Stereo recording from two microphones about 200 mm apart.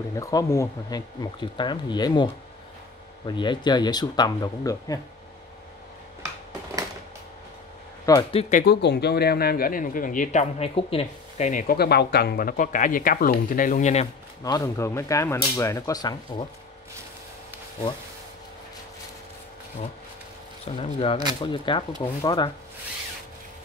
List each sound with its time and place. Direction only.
0.2 s speech: 15° left (ahead or behind)
3.3 s speech: 20° left (ahead or behind)
8.0 s speech: 15° left (ahead or behind)
8.3 s speech: 35° left (ahead or behind)
8.6 s speech: 55° left (ahead or behind); by 14.0 s 35° left (ahead or behind)
14.4 s speech: 15° left (ahead or behind)
20.6 s speech: 30° left (ahead or behind)